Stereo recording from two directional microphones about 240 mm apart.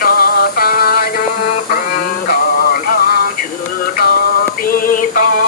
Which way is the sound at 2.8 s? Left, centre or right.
Left.